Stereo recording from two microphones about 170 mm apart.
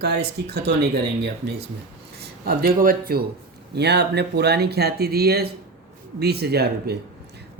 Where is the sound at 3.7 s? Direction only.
75° right (ahead or behind).